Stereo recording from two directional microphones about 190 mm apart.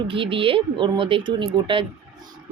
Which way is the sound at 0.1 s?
25° right (ahead or behind).